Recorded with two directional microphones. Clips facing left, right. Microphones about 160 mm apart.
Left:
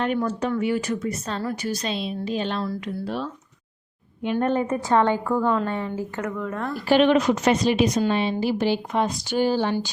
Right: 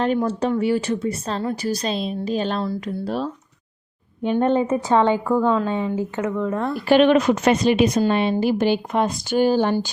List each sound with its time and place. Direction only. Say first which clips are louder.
0.3 s a woman's voice: right 3 dB; 30° right (ahead or behind)
4.4 s a woman's voice: right 4 dB; 25° right (ahead or behind)
6.8 s a woman's voice: right 3 dB; 55° right (ahead or behind)